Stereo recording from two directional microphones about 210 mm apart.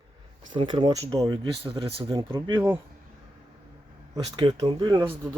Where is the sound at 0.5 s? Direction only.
20° right (ahead or behind).